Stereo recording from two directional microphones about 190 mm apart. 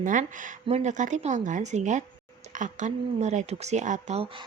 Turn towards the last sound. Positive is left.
turn(degrees=-30)  # may be behind; listen again after turning